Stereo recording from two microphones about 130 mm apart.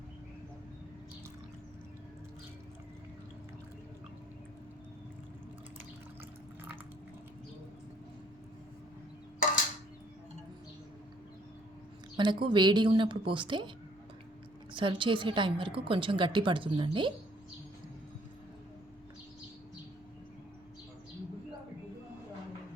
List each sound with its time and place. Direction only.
12.1 s a woman's voice: 35° right (ahead or behind)
14.7 s a woman's voice: 40° right (ahead or behind)